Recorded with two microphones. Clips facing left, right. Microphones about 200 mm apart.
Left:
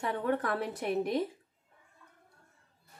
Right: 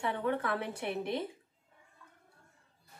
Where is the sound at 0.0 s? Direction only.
45° left (ahead or behind).